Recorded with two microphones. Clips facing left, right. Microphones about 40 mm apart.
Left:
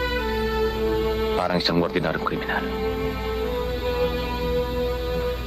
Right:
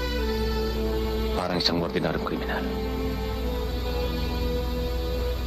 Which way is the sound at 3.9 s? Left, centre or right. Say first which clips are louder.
Left 5 dB; left.